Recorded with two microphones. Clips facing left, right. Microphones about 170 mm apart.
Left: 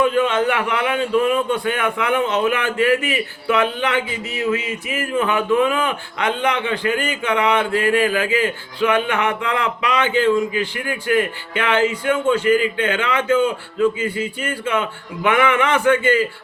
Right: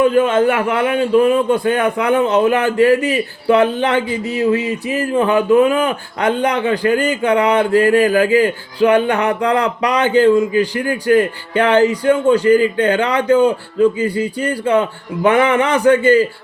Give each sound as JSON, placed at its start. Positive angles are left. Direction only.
{"t": 0.0, "sound": "a man's voice", "side_deg": -40}